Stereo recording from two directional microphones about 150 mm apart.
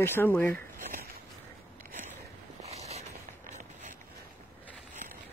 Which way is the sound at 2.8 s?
45° right (ahead or behind).